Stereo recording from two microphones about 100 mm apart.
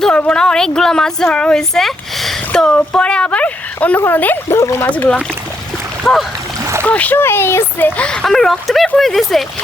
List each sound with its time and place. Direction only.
0.0 s speech: 10° left (ahead or behind)
6.0 s speech: 5° left (ahead or behind)
6.8 s speech: 15° left (ahead or behind)